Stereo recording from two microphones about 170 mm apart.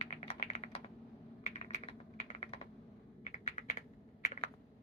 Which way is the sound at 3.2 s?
40° left (ahead or behind).